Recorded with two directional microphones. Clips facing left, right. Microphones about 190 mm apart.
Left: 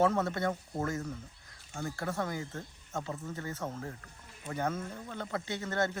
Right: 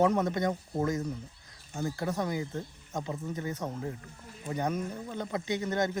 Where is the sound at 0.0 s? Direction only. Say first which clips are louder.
Right 2 dB; 15° right (ahead or behind).